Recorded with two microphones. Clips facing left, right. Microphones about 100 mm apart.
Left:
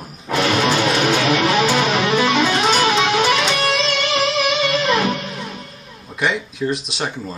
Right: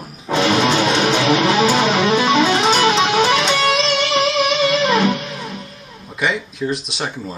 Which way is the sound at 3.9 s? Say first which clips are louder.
Right 2 dB; 30° right (ahead or behind).